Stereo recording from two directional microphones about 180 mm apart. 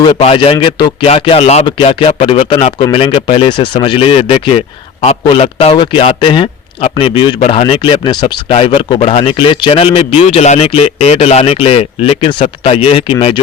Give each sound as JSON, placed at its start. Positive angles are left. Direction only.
{"t": 0.0, "sound": "a man's voice", "side_deg": 30}